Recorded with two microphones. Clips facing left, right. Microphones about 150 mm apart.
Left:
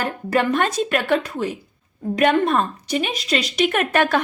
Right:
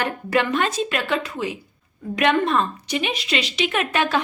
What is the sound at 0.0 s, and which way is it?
A woman's voice, 40° left (ahead or behind).